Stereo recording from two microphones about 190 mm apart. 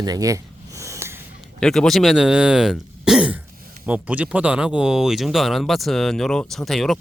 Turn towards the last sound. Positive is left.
turn(degrees=0)  # may be behind; listen again after turning